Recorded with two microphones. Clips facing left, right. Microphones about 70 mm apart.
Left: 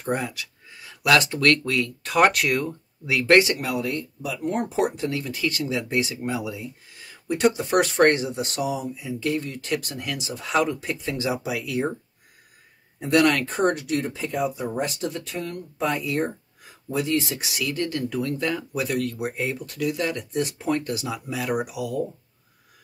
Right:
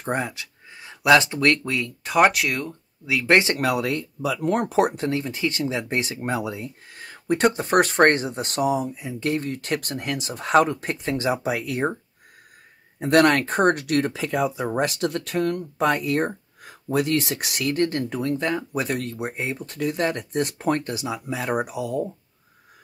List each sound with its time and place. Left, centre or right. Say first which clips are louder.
0.0 s speech: right 1 dB; right; by 3.3 s centre
3.5 s speech: right 4 dB; right
4.9 s speech: right 2 dB; right
13.0 s speech: right 2 dB; right
18.2 s speech: right 2 dB; right
20.8 s speech: even; right